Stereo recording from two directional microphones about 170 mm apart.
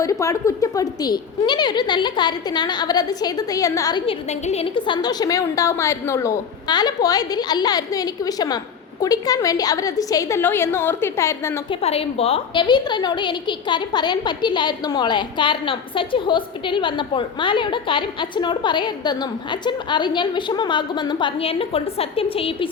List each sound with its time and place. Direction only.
0.0 s a woman's voice: 20° left (ahead or behind)
4.0 s a woman's voice: 40° left (ahead or behind); by 11.6 s 15° left (ahead or behind)
11.7 s a woman's voice: 35° left (ahead or behind)